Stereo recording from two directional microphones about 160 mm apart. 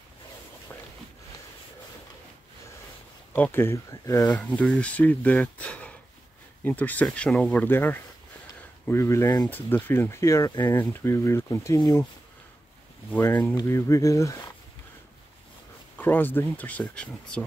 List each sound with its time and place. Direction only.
3.3 s speech: 10° left (ahead or behind)
4.3 s speech: 5° left (ahead or behind)
13.1 s speech: 15° left (ahead or behind)
16.0 s speech: 10° left (ahead or behind)